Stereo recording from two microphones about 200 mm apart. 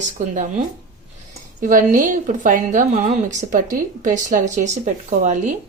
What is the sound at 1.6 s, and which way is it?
A woman's voice, 40° right (ahead or behind).